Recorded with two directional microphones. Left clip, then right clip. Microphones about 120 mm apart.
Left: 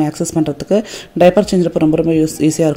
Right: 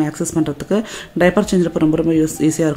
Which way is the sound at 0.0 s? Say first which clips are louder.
Left 3 dB; 35° left (ahead or behind).